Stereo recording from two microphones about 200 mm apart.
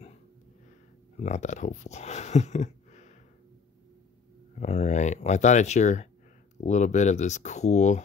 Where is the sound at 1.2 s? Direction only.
35° left (ahead or behind).